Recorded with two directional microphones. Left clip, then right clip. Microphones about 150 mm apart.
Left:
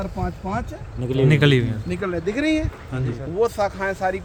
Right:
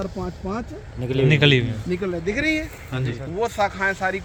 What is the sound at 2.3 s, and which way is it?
Speech, 5° left (ahead or behind).